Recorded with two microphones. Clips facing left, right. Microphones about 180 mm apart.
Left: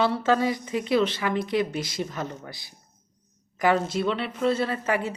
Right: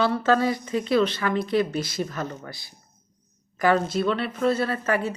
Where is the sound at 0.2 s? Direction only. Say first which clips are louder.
Right 1 dB; 15° left (ahead or behind).